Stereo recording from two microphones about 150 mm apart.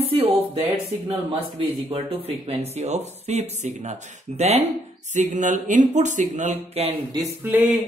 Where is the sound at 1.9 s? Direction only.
45° right (ahead or behind).